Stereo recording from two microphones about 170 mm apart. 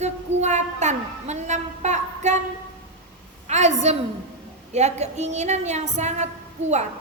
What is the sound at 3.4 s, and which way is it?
A woman's voice, 40° right (ahead or behind).